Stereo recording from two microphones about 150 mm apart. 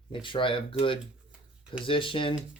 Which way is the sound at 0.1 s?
35° left (ahead or behind).